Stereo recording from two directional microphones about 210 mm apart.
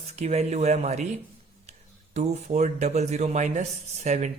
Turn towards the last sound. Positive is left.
turn(degrees=-35)  # may be behind; listen again after turning